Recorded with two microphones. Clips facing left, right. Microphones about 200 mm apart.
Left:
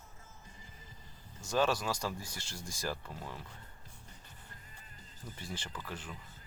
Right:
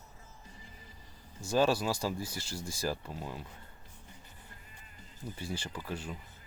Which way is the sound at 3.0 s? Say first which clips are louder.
Right 4 dB; 20° right (ahead or behind).